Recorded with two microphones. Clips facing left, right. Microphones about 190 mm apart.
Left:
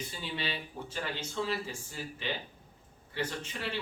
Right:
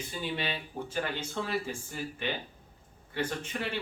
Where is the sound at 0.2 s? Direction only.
50° right (ahead or behind).